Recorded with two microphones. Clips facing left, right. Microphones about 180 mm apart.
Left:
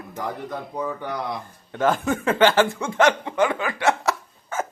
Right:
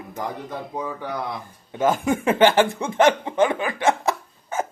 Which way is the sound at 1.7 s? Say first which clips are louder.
Right 1 dB; 10° right (ahead or behind).